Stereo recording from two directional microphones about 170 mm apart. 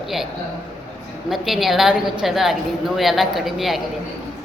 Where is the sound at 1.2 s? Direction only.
Centre (ahead or behind).